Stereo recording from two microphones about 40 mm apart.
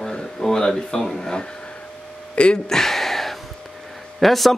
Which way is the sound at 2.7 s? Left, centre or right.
Centre.